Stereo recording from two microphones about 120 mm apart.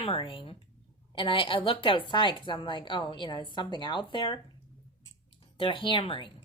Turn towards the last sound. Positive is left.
turn(degrees=45)  # may be behind; listen again after turning